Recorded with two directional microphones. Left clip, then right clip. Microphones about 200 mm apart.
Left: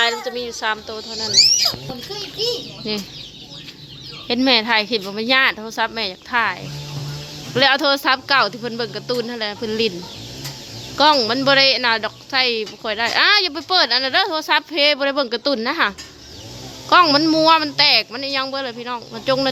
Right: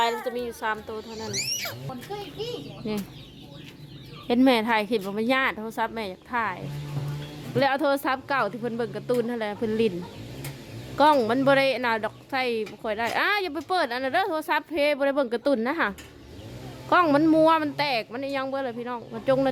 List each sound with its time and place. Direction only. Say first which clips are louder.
0.0 s a child's voice: left 6 dB; 5° right (ahead or behind)
1.3 s speech: left 17 dB; 45° right (ahead or behind)
4.3 s a woman's voice: left 5 dB; 15° right (ahead or behind)
10.9 s a woman's voice: left 5 dB; 10° right (ahead or behind)